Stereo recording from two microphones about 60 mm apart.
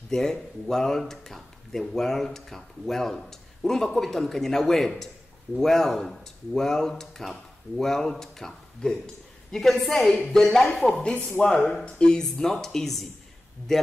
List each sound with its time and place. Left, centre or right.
0.1 s speech: centre
11.1 s speech: left
11.4 s speech: centre